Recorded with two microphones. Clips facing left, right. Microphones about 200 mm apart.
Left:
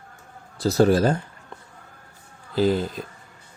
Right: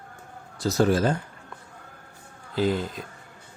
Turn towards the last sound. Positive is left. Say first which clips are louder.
# left 4 dB
turn(degrees=35)  # may be behind; listen again after turning